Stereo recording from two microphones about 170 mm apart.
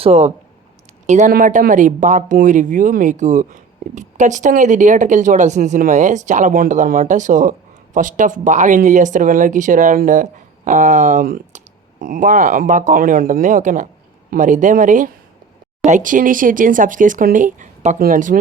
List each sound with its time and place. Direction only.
0.0 s speech: 40° right (ahead or behind)